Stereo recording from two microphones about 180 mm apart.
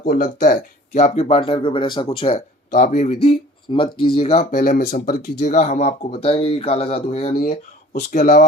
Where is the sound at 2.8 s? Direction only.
40° left (ahead or behind).